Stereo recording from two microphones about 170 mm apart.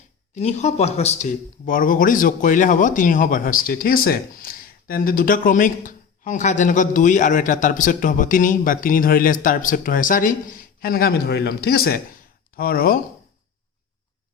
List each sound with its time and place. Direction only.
0.3 s speech: 40° left (ahead or behind); by 13.0 s 60° left (ahead or behind)